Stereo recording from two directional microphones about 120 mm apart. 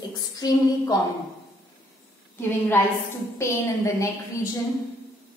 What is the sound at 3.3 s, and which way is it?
Speech, 25° left (ahead or behind).